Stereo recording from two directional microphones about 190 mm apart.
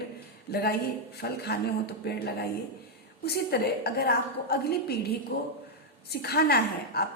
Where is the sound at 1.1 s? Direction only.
60° left (ahead or behind).